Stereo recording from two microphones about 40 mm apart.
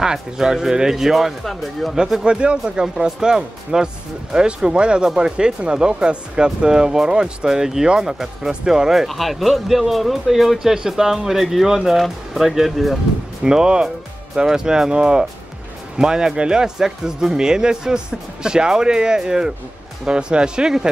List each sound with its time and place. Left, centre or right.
0.0 s speech: centre
2.2 s speech: right
9.0 s speech: centre
13.4 s speech: centre